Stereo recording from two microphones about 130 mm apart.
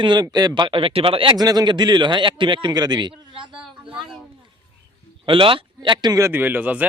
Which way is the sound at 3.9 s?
5° right (ahead or behind).